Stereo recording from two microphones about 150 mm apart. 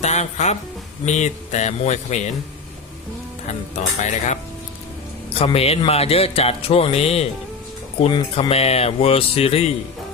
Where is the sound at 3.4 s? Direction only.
50° left (ahead or behind).